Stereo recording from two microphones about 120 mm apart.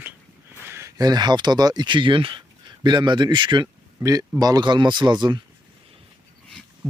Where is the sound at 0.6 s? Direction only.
25° right (ahead or behind).